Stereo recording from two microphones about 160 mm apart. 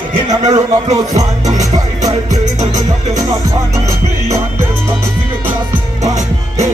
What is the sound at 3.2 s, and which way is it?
Music, 20° right (ahead or behind).